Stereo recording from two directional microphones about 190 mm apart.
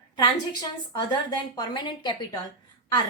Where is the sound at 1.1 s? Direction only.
20° left (ahead or behind).